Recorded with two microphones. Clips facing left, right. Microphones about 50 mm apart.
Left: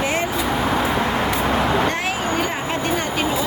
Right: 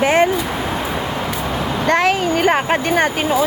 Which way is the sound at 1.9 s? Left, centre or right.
Right.